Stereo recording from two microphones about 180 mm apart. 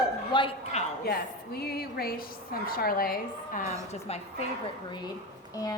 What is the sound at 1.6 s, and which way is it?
A woman's voice, 60° left (ahead or behind).